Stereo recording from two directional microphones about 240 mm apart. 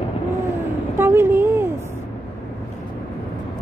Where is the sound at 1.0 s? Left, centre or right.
Centre.